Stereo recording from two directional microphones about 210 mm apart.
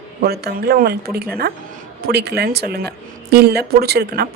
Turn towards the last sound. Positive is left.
turn(degrees=-50)  # may be behind; listen again after turning